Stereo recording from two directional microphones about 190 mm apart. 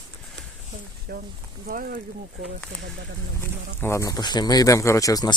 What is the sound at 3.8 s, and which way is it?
Speech, 15° left (ahead or behind).